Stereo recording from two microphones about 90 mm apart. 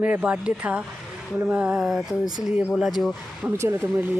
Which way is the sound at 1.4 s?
15° right (ahead or behind).